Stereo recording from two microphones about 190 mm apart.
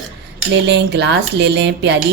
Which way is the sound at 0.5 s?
65° right (ahead or behind).